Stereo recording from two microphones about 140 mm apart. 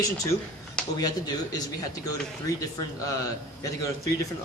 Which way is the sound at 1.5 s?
25° left (ahead or behind).